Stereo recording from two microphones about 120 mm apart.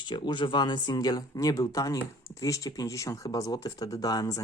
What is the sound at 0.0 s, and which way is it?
Speech, 40° left (ahead or behind).